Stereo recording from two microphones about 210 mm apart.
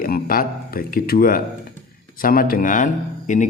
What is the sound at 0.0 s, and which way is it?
Speech, 45° left (ahead or behind).